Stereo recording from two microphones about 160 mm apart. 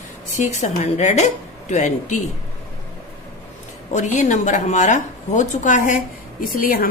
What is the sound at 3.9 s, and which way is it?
A woman's voice, 50° left (ahead or behind).